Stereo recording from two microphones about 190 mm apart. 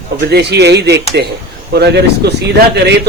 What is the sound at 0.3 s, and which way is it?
A man's voice, 60° right (ahead or behind).